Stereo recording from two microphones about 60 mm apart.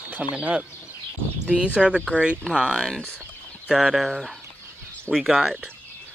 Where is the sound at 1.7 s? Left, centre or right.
Centre.